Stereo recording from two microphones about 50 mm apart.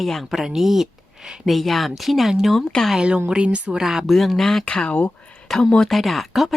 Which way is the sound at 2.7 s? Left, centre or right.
Centre.